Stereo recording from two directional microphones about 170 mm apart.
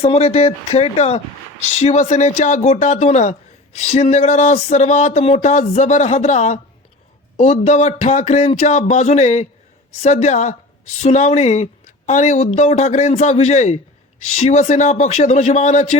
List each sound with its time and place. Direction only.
0.0 s a woman's voice: 35° left (ahead or behind)